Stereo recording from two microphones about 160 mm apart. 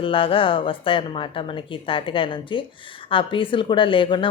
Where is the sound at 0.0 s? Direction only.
35° left (ahead or behind).